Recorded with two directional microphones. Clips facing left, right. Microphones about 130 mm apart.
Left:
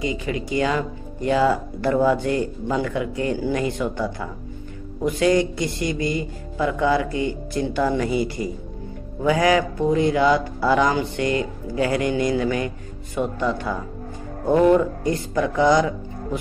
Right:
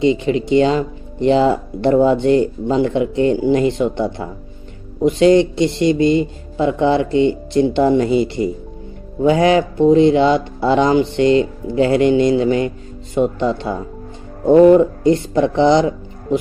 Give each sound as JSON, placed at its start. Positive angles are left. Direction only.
{"t": 0.0, "sound": "speech", "side_deg": -25}